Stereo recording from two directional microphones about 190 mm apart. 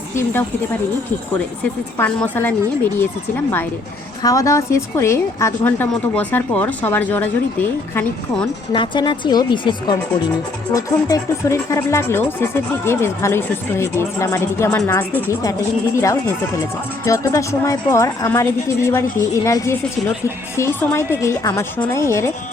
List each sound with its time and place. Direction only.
0.2 s speech: 10° left (ahead or behind)
2.0 s speech: 10° left (ahead or behind)
8.7 s speech: 25° left (ahead or behind)